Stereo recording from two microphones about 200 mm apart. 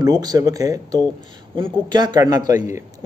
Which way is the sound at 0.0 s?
20° right (ahead or behind).